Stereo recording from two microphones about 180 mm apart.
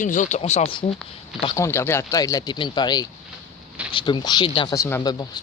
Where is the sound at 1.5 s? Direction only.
15° left (ahead or behind).